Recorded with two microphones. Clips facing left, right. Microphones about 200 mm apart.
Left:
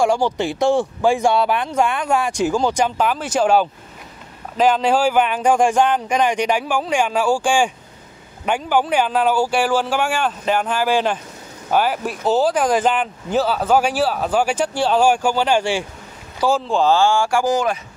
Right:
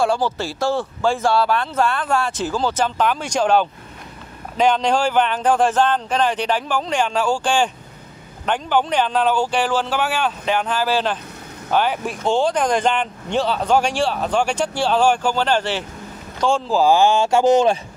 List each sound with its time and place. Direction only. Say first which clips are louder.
0.0 s speech: left 2 dB; 15° left (ahead or behind); by 16.9 s 5° right (ahead or behind)
16.9 s speech: right 2 dB; 20° right (ahead or behind)